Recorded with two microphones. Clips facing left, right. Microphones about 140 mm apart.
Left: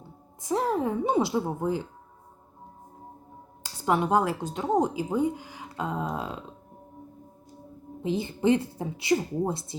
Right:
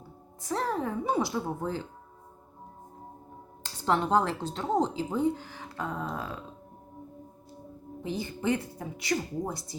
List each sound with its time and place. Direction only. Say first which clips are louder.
0.4 s speech: left 4 dB; 15° left (ahead or behind)
3.6 s speech: left 2 dB; 10° left (ahead or behind)
8.0 s a woman's voice: left 6 dB; 20° left (ahead or behind)